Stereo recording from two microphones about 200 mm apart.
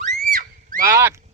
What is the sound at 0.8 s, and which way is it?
Speech, 15° right (ahead or behind).